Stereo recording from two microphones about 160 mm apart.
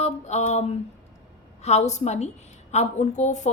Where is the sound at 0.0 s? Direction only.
45° left (ahead or behind).